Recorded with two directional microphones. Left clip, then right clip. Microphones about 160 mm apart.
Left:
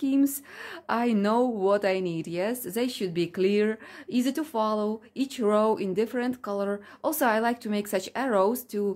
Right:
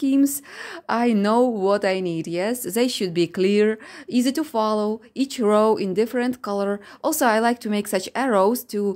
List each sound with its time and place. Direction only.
0.0 s speech: 30° right (ahead or behind)